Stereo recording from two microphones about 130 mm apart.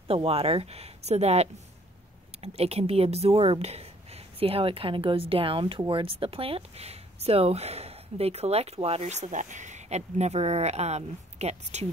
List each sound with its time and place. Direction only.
0.1 s speech: 50° right (ahead or behind)